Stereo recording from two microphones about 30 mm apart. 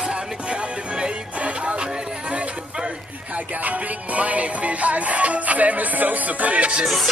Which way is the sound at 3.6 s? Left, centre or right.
Right.